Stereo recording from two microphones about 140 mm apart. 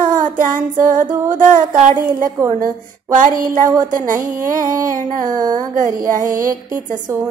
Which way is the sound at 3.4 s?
75° right (ahead or behind).